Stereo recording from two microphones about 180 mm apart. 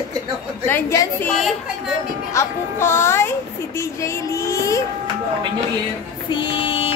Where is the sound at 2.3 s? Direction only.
15° left (ahead or behind).